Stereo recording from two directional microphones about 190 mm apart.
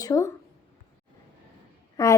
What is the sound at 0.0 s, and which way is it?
Speech, 15° left (ahead or behind).